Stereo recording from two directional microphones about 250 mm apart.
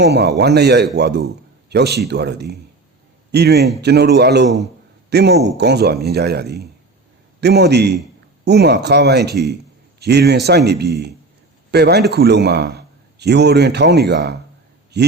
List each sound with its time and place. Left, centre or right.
0.0 s a man's voice: right